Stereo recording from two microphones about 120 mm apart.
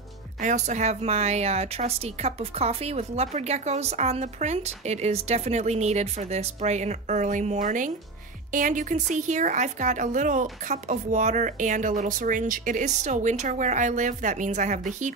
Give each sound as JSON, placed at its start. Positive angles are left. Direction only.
{"t": 0.4, "sound": "a woman's voice", "side_deg": -80}